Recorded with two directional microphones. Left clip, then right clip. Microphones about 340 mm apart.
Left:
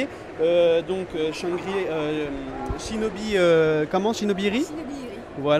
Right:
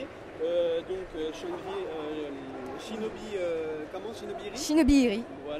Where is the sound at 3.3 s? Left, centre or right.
Left.